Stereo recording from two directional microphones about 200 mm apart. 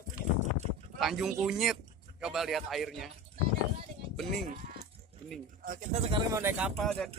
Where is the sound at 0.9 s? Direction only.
Centre (ahead or behind).